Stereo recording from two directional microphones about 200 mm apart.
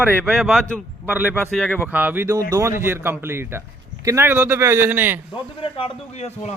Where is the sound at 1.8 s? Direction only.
10° right (ahead or behind).